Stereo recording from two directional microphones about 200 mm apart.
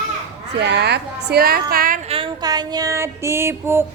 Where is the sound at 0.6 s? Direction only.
55° right (ahead or behind).